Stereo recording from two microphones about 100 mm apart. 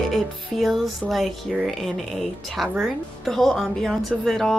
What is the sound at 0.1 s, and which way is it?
A woman's voice, centre (ahead or behind).